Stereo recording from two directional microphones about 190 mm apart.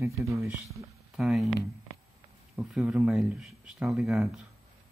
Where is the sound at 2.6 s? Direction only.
5° right (ahead or behind).